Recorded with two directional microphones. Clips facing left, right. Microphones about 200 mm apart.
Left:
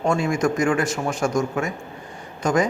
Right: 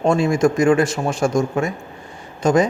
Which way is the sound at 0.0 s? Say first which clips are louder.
Right 5 dB; 30° right (ahead or behind).